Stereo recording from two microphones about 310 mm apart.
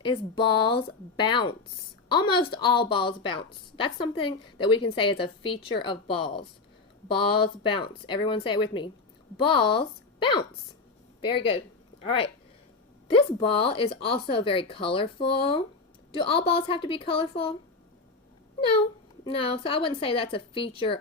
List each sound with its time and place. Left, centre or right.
0.0 s speech: centre
19.2 s speech: centre